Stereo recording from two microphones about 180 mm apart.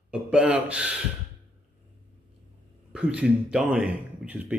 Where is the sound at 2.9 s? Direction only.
5° right (ahead or behind).